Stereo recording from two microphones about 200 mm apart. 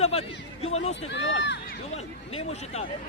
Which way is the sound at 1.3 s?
60° left (ahead or behind).